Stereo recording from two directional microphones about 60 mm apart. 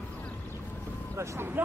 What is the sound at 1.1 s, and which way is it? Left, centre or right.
Speech, right.